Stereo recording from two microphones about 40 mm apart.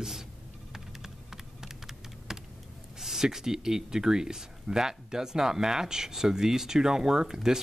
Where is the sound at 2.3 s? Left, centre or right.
Centre.